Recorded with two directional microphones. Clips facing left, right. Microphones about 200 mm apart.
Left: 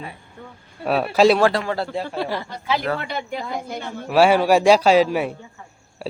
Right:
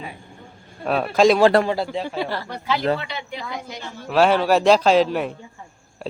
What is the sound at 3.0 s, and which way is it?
A woman's voice, 50° left (ahead or behind).